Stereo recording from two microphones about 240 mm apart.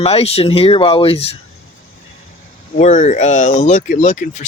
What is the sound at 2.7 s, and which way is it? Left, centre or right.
Speech, left.